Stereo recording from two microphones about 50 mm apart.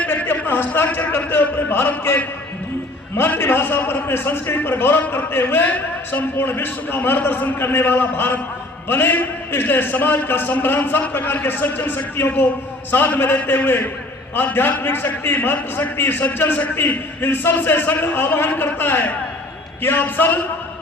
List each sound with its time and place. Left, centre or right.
0.1 s a sound: left
1.1 s a man's voice: left
3.3 s a man's voice: left
5.6 s a man's voice: left
7.6 s a man's voice: left